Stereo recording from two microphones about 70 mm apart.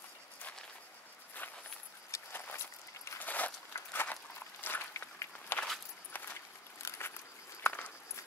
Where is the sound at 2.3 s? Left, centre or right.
Left.